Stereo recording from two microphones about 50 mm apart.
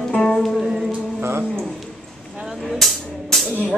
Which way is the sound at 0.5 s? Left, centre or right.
Centre.